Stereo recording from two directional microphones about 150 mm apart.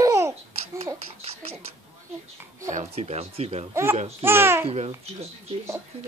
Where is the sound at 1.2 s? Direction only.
40° right (ahead or behind).